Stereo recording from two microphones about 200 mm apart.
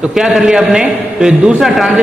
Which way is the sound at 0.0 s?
Centre (ahead or behind).